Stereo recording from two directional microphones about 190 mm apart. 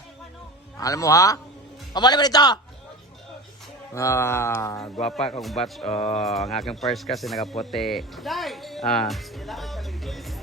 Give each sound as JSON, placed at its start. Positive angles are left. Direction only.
{"t": 0.8, "sound": "music", "side_deg": 15}
{"t": 1.9, "sound": "a man's voice", "side_deg": 20}
{"t": 3.9, "sound": "music", "side_deg": 15}
{"t": 5.0, "sound": "speech", "side_deg": 0}
{"t": 5.9, "sound": "a sound", "side_deg": 35}
{"t": 6.1, "sound": "speech", "side_deg": 0}